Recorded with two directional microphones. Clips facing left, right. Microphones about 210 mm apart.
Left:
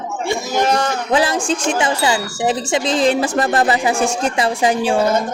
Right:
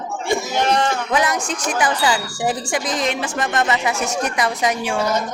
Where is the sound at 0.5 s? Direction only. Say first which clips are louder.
Left 3 dB; 45° left (ahead or behind).